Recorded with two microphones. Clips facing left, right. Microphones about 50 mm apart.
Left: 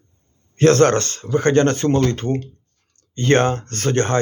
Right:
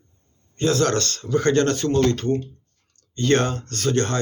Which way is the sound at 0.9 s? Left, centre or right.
Left.